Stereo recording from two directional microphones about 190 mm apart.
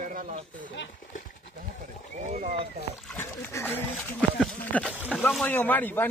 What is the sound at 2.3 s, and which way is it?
Speech, 40° right (ahead or behind).